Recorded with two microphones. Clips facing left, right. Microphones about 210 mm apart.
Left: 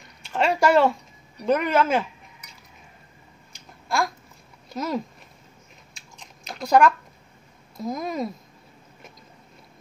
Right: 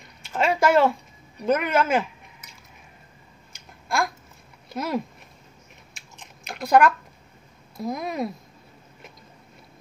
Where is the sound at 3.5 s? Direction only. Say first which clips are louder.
Even; centre (ahead or behind).